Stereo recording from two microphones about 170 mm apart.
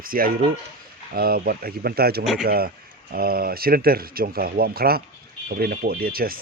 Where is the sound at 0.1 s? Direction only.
55° right (ahead or behind).